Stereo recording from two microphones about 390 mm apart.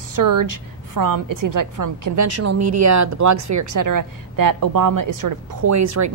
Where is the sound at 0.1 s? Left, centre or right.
Right.